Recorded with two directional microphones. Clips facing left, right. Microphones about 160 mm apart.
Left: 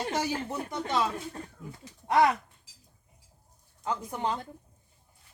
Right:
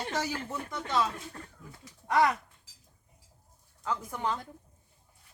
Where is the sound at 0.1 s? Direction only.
20° left (ahead or behind).